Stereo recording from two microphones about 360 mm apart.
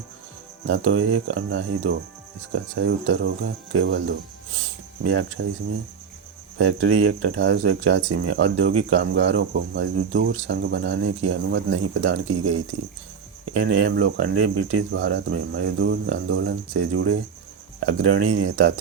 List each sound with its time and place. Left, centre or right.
0.7 s speech: right
5.0 s speech: right
6.6 s speech: right
13.7 s speech: right